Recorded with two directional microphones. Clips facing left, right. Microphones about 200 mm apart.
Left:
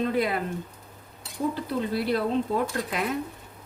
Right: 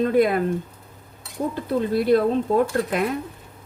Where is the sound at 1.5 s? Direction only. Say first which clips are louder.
Right 6 dB; 50° right (ahead or behind).